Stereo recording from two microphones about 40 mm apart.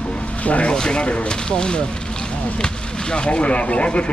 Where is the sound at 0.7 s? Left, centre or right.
Left.